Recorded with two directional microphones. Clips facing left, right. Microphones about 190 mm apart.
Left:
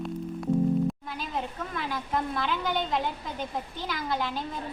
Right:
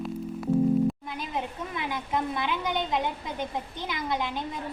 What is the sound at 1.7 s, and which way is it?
A woman's voice, 15° right (ahead or behind).